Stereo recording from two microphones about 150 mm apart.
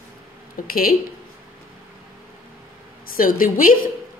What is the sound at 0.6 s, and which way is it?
Speech, 70° left (ahead or behind).